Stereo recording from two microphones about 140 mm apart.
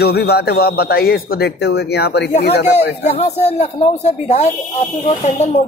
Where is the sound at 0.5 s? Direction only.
90° left.